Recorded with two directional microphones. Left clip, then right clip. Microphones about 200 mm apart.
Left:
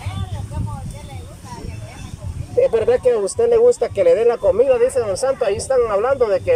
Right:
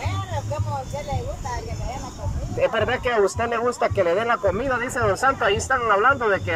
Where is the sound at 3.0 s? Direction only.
25° left (ahead or behind).